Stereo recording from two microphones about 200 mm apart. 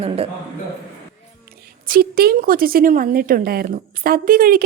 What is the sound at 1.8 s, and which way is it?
Speech, 45° right (ahead or behind).